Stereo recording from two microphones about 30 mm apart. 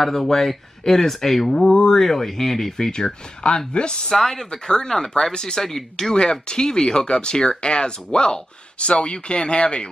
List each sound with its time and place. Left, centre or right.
0.0 s speech: centre
3.4 s speech: left
4.1 s speech: centre
4.5 s speech: left
4.8 s speech: centre
6.4 s speech: left
8.7 s speech: left